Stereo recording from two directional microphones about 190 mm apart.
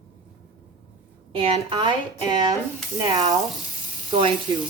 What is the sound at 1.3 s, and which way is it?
A woman's voice, 30° right (ahead or behind).